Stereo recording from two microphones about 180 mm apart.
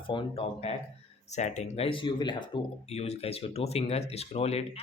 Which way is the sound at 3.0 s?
35° left (ahead or behind).